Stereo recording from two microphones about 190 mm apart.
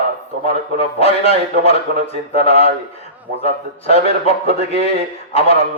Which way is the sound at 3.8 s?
30° left (ahead or behind).